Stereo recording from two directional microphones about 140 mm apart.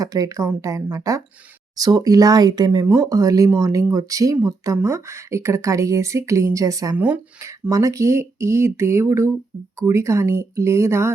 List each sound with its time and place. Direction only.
0.0 s speech: 25° right (ahead or behind)
6.9 s speech: 10° right (ahead or behind)
7.7 s speech: 25° right (ahead or behind)